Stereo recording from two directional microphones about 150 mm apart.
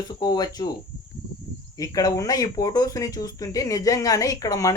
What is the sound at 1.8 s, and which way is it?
Speech, 25° left (ahead or behind).